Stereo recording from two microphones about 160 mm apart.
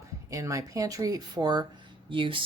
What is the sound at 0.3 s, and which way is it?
Speech, 20° right (ahead or behind).